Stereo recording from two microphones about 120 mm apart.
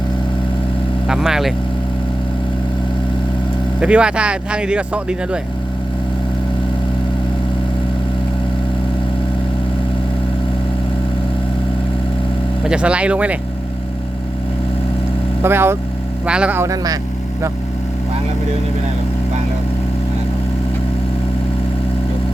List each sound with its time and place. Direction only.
1.0 s speech: 5° right (ahead or behind)
3.8 s speech: 10° right (ahead or behind)
12.6 s speech: 10° right (ahead or behind)
15.4 s speech: 20° right (ahead or behind)
16.2 s speech: 10° right (ahead or behind)
16.6 s speech: 30° right (ahead or behind)